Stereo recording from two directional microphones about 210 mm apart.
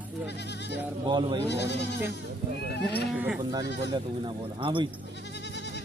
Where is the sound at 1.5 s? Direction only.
55° left (ahead or behind).